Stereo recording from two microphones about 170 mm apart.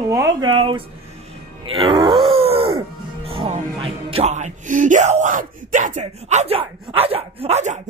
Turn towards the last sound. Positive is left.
turn(degrees=-40)  # may be behind; listen again after turning